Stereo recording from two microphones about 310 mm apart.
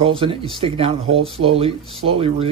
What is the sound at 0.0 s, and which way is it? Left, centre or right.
Speech, centre.